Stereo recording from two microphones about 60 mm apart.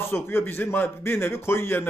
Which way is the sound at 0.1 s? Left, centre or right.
Left.